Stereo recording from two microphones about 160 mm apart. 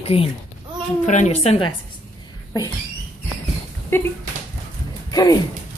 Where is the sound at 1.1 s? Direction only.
45° left (ahead or behind).